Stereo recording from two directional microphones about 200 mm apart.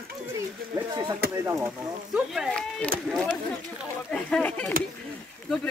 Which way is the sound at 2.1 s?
Centre (ahead or behind).